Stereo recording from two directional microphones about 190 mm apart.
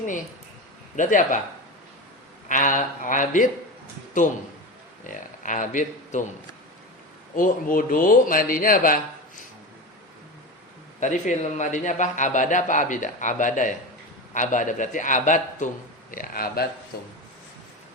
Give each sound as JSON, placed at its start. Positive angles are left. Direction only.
{"t": 0.9, "sound": "a man's voice", "side_deg": 40}
{"t": 2.5, "sound": "a man's voice", "side_deg": 45}
{"t": 5.0, "sound": "speech", "side_deg": 45}
{"t": 7.3, "sound": "a man's voice", "side_deg": 45}
{"t": 11.0, "sound": "a man's voice", "side_deg": 40}